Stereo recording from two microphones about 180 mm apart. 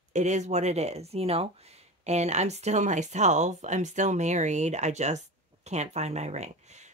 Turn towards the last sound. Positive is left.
turn(degrees=-40)  # may be behind; listen again after turning